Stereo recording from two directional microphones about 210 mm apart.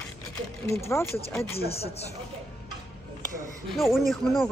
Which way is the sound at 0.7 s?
15° left (ahead or behind).